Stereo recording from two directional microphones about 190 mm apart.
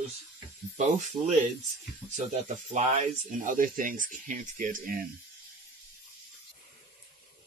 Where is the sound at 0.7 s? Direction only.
40° right (ahead or behind).